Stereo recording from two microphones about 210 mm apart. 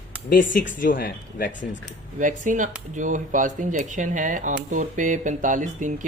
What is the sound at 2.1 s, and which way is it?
Speech, 35° right (ahead or behind).